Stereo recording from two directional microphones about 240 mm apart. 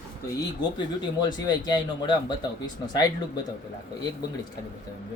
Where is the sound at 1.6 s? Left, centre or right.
Centre.